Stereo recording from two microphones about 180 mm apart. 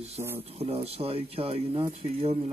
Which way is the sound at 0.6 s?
35° right (ahead or behind).